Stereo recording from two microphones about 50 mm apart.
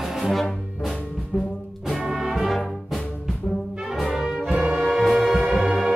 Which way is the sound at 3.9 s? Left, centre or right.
Centre.